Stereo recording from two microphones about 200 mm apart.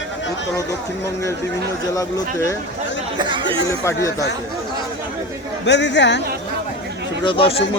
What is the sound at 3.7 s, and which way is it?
Speech, 15° left (ahead or behind).